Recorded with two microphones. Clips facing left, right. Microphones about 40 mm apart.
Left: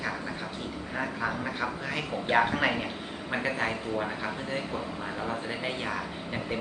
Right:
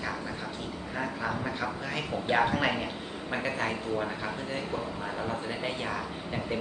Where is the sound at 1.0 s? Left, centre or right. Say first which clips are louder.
Left 1 dB; centre.